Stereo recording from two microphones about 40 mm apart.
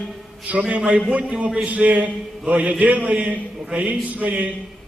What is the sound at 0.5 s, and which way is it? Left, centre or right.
A man's voice, right.